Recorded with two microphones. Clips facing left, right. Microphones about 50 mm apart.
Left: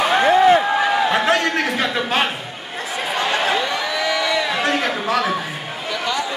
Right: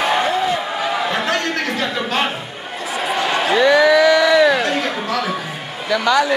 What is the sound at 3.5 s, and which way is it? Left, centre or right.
Crowd, right.